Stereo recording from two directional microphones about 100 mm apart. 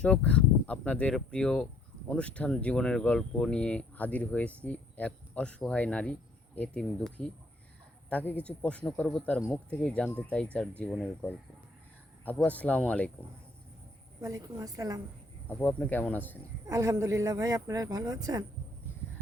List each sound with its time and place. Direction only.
0.0 s speech: 15° left (ahead or behind)
12.5 s speech: 15° left (ahead or behind)
14.2 s speech: 35° right (ahead or behind)
15.4 s speech: 20° left (ahead or behind)
16.6 s speech: 30° right (ahead or behind)